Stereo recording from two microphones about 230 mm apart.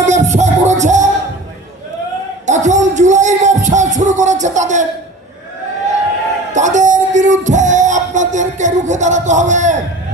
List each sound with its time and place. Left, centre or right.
0.0 s music: right
2.4 s music: right
6.5 s music: right